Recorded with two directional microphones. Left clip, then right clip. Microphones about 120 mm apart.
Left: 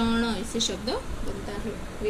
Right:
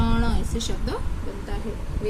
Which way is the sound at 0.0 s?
5° right (ahead or behind).